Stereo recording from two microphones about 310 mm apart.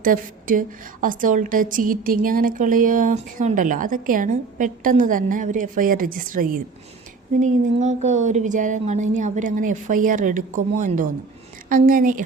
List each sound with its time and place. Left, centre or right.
0.0 s a woman's voice: right